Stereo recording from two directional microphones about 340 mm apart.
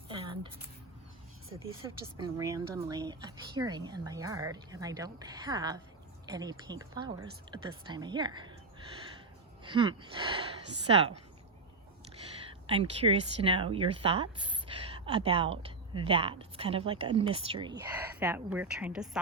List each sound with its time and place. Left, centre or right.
0.1 s a sound: centre
2.1 s speech: centre
9.6 s speech: centre
12.6 s a woman's voice: centre